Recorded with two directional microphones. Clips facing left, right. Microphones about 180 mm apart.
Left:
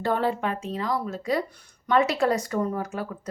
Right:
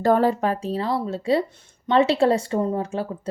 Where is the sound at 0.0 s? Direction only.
40° right (ahead or behind).